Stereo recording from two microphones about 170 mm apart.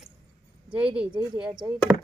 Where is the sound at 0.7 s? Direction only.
5° right (ahead or behind).